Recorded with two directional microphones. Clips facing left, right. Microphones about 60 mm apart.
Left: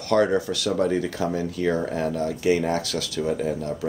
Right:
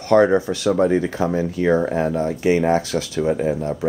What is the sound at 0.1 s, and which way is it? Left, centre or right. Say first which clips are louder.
Speech: right 6 dB; right.